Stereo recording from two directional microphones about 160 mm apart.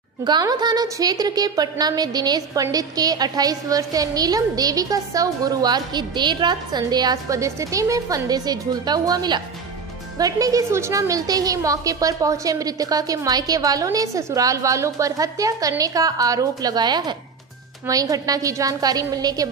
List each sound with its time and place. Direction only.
0.2 s a woman's voice: 25° right (ahead or behind)